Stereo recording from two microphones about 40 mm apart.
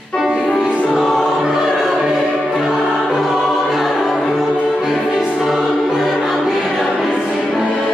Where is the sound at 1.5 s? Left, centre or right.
Centre.